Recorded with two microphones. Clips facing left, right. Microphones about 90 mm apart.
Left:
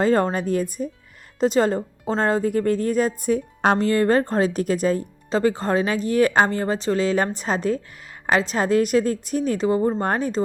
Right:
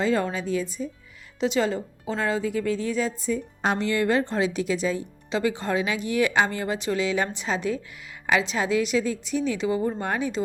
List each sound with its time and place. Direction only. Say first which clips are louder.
0.0 s speech: left 5 dB; 45° left (ahead or behind)
3.8 s speech: left 2 dB; 40° left (ahead or behind)